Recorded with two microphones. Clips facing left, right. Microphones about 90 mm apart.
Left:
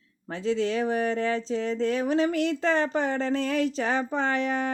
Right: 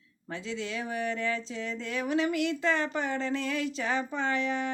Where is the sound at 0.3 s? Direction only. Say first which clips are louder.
Left 9 dB; 35° left (ahead or behind).